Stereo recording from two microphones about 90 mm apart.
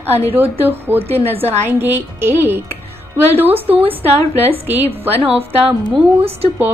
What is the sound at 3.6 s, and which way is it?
A woman's voice, 90° right.